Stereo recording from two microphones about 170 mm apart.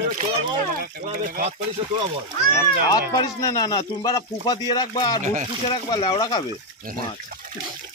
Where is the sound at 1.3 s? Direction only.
45° right (ahead or behind).